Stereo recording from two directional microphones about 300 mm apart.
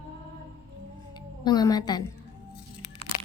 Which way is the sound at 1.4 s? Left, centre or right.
Centre.